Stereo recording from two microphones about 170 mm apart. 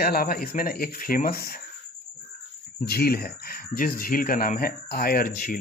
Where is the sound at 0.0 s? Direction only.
60° left (ahead or behind).